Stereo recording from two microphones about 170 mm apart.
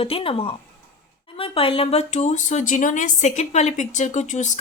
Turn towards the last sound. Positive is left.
turn(degrees=45)  # may be behind; listen again after turning